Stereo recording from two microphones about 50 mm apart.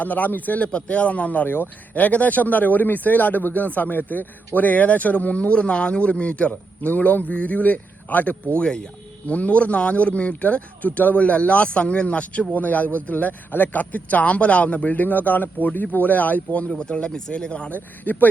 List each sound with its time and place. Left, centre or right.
0.0 s speech: left
1.5 s speech: left
8.5 s a man's voice: centre
9.2 s a man's voice: left
16.7 s a man's voice: centre
17.7 s speech: left